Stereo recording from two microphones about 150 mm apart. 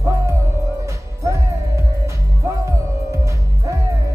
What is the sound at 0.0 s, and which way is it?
Music, 20° right (ahead or behind).